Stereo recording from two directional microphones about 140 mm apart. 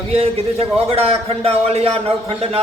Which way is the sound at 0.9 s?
45° right (ahead or behind).